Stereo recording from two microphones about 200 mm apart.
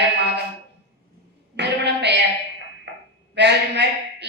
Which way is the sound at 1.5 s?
60° right (ahead or behind).